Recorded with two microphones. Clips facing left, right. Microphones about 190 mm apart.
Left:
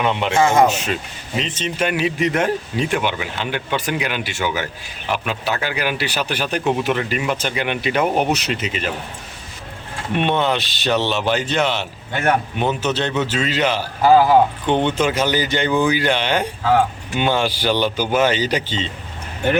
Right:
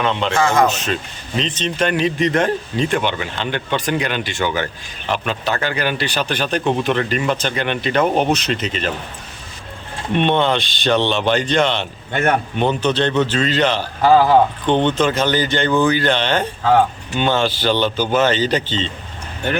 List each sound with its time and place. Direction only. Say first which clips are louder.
0.0 s speech: left 1 dB; 15° left (ahead or behind)
0.7 s speech: even; 10° left (ahead or behind)
10.2 s speech: right 2 dB; 5° left (ahead or behind)